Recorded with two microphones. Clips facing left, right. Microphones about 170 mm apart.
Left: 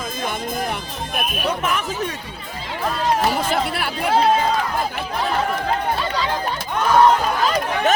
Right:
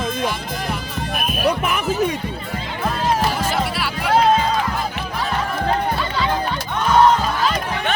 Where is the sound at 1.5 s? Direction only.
10° right (ahead or behind).